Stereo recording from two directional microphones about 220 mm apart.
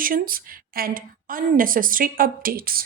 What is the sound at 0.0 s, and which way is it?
A woman's voice, 40° right (ahead or behind).